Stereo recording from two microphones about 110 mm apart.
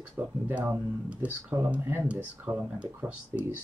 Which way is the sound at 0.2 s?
25° right (ahead or behind).